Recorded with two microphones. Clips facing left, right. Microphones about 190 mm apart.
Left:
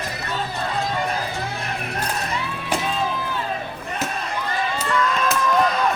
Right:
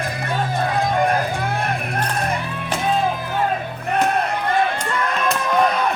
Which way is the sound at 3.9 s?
60° right (ahead or behind).